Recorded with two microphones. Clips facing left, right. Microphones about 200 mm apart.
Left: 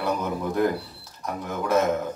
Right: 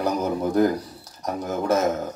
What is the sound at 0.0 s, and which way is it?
A man's voice, 40° right (ahead or behind).